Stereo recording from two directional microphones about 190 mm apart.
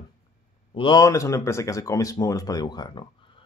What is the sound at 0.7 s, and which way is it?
Speech, 25° left (ahead or behind).